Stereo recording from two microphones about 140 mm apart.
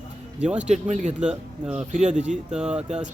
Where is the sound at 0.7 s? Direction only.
55° right (ahead or behind).